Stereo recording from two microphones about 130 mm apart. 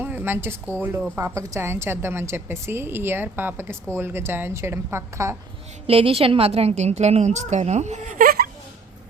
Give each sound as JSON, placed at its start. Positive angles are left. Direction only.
{"t": 0.0, "sound": "a woman's voice", "side_deg": -15}
{"t": 5.9, "sound": "a woman's voice", "side_deg": -45}